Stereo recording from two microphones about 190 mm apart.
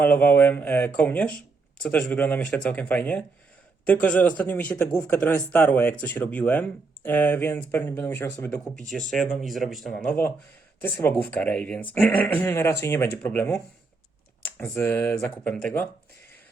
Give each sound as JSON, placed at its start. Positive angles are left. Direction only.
{"t": 0.0, "sound": "speech", "side_deg": 10}